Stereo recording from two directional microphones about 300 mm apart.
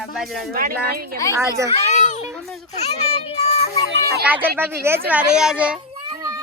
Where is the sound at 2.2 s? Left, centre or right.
Centre.